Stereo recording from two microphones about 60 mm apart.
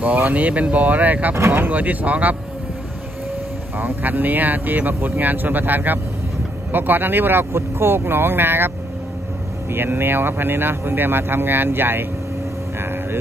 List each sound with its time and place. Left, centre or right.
0.0 s speech: right
3.7 s speech: right